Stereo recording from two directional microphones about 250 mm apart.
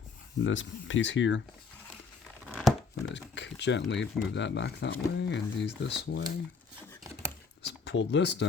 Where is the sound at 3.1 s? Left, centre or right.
Left.